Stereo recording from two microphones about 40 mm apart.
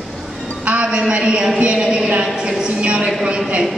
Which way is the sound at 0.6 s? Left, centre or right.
Right.